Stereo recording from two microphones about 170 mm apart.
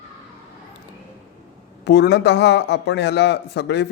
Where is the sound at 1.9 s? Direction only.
85° left.